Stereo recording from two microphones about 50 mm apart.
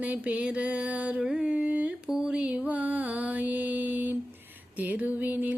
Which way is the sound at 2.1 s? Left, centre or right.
Centre.